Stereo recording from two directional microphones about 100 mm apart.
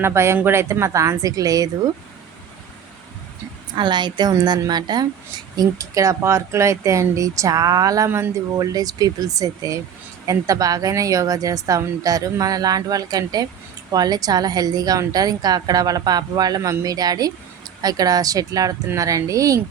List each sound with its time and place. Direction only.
0.0 s a woman's voice: 25° right (ahead or behind)
3.8 s a woman's voice: 50° right (ahead or behind)